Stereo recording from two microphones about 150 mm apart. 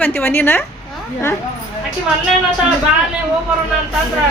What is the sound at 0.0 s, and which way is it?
Speech, 15° left (ahead or behind).